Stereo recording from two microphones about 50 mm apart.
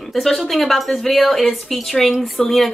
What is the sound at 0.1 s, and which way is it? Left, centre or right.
A woman's voice, centre.